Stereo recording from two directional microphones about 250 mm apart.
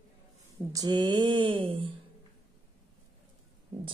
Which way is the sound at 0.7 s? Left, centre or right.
Centre.